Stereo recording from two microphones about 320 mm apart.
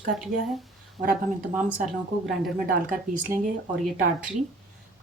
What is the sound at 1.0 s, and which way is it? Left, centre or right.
Speech, right.